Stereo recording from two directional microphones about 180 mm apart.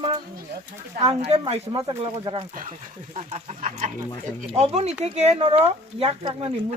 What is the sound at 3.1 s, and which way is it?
Speech, 40° right (ahead or behind).